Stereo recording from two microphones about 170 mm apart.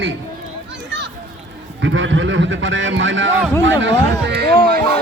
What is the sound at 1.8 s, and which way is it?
A man's voice, 90° right.